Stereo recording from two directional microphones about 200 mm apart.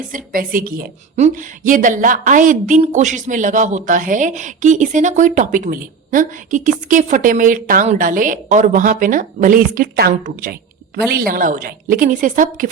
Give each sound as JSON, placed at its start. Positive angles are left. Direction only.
{"t": 0.1, "sound": "a woman's voice", "side_deg": -45}